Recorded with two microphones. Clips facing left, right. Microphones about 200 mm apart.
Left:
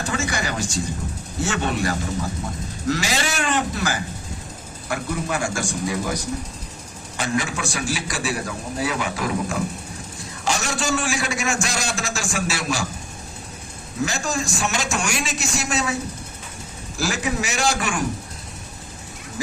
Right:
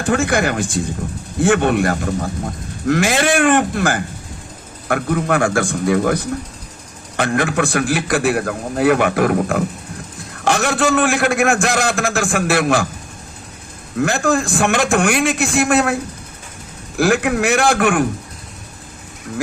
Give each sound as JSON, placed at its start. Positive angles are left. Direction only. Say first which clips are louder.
{"t": 0.0, "sound": "a man's voice", "louder": "right 9 dB", "side_deg": -55}
{"t": 14.0, "sound": "a man's voice", "louder": "right 8 dB", "side_deg": -55}
{"t": 17.0, "sound": "a man's voice", "louder": "right 9 dB", "side_deg": -60}